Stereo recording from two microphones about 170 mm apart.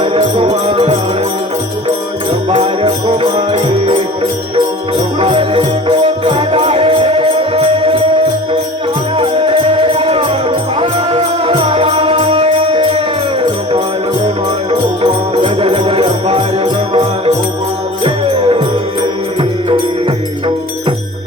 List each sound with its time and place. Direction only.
0.0 s music: 30° right (ahead or behind)
2.5 s music: 30° right (ahead or behind)
5.2 s music: 30° right (ahead or behind)
9.1 s music: 30° right (ahead or behind)
14.7 s music: 30° right (ahead or behind)